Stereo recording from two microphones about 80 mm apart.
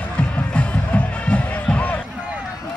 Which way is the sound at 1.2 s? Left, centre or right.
Centre.